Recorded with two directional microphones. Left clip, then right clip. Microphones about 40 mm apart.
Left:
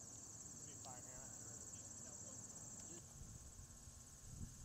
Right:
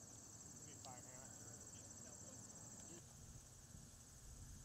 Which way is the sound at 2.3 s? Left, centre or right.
Left.